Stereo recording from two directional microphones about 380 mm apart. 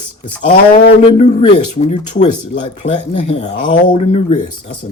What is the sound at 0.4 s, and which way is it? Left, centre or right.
Speech, left.